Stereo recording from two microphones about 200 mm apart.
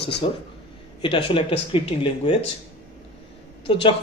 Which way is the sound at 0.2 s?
30° left (ahead or behind).